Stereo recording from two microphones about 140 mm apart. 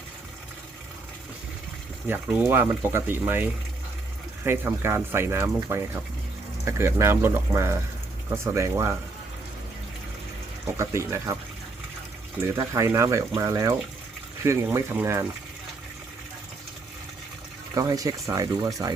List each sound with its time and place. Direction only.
2.0 s speech: 15° right (ahead or behind)
10.8 s speech: 20° right (ahead or behind)
12.5 s speech: 20° right (ahead or behind)
17.7 s speech: 25° right (ahead or behind)